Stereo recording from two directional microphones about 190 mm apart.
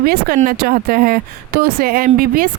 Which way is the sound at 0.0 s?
50° right (ahead or behind).